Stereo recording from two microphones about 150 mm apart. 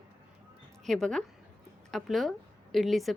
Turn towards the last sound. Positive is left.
turn(degrees=0)  # may be behind; listen again after turning